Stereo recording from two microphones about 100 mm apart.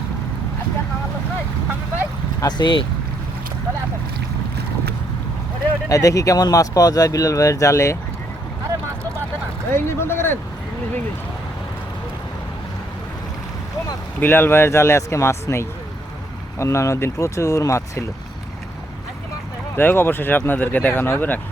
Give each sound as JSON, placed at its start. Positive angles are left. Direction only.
{"t": 2.5, "sound": "speech", "side_deg": 50}
{"t": 5.9, "sound": "speech", "side_deg": 35}
{"t": 9.7, "sound": "speech", "side_deg": 25}
{"t": 14.2, "sound": "speech", "side_deg": 20}
{"t": 19.7, "sound": "speech", "side_deg": 20}